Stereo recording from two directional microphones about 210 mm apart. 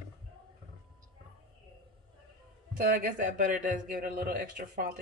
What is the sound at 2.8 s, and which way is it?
Speech, 40° right (ahead or behind).